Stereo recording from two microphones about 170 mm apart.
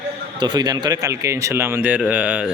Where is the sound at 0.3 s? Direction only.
25° right (ahead or behind).